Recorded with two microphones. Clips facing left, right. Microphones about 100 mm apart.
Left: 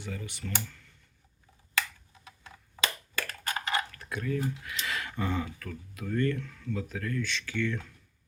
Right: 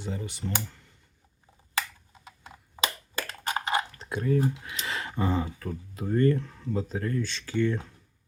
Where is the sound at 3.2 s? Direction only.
25° right (ahead or behind).